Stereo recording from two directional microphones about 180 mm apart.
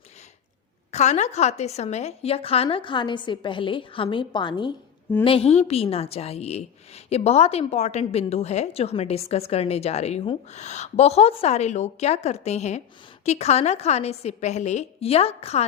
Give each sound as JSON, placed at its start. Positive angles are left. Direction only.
{"t": 0.9, "sound": "a woman's voice", "side_deg": 40}